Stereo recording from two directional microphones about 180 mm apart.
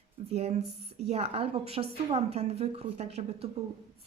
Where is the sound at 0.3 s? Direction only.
35° right (ahead or behind).